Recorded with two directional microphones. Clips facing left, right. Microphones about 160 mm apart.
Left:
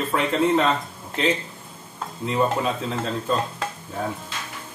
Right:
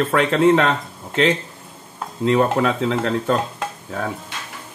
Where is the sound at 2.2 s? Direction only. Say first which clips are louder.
Right 6 dB; 70° right (ahead or behind).